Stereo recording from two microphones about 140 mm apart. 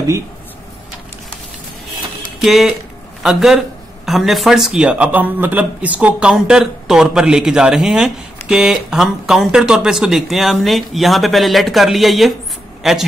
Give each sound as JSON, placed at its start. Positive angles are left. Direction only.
{"t": 2.4, "sound": "speech", "side_deg": 0}